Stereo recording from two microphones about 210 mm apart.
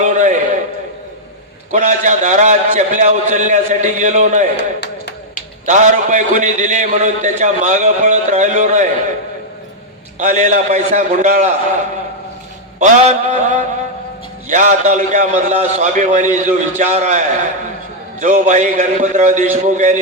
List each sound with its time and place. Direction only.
0.0 s a sound: 35° right (ahead or behind)
1.7 s a man's voice: 35° right (ahead or behind)
4.8 s a sound: 50° left (ahead or behind)
5.6 s a man's voice: 35° right (ahead or behind)
10.2 s a man's voice: 35° right (ahead or behind)
12.8 s a man's voice: 35° right (ahead or behind)